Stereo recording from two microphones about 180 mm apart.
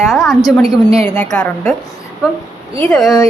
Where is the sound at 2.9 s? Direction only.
Centre (ahead or behind).